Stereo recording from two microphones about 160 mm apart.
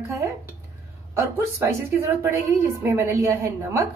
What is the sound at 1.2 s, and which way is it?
A woman's voice, 15° right (ahead or behind).